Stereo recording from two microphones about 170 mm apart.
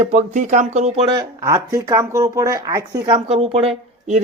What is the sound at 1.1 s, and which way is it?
Speech, 20° right (ahead or behind).